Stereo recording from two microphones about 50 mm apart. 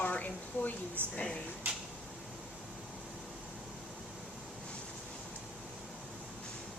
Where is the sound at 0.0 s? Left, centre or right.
Left.